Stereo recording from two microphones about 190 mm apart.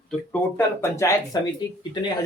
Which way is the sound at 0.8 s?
15° left (ahead or behind).